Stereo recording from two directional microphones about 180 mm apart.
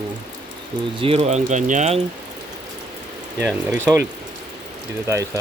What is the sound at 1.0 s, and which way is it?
Speech, 35° right (ahead or behind).